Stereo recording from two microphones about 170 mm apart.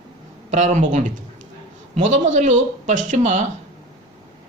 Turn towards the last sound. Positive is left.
turn(degrees=-45)  # may be behind; listen again after turning